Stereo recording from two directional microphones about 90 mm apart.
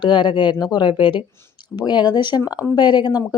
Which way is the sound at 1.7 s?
55° left (ahead or behind).